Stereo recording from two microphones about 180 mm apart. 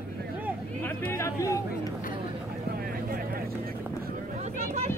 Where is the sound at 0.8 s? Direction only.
10° left (ahead or behind).